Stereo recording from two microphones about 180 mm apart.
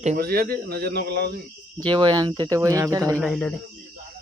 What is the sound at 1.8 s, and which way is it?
Speech, 25° right (ahead or behind).